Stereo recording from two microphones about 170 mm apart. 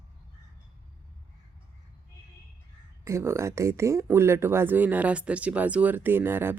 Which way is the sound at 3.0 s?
15° right (ahead or behind).